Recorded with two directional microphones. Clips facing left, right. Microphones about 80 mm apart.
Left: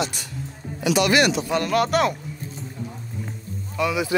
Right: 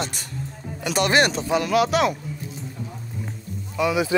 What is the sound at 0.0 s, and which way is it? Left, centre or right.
Speech, right.